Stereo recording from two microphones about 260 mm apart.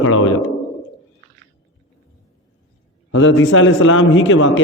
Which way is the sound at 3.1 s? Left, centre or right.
Left.